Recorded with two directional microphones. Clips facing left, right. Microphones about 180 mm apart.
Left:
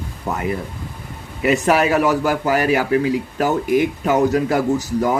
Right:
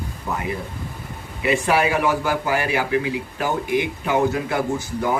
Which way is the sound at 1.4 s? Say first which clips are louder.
Left 3 dB; 40° left (ahead or behind).